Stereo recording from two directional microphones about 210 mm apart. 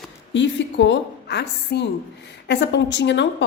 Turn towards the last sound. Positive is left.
turn(degrees=55)  # may be behind; listen again after turning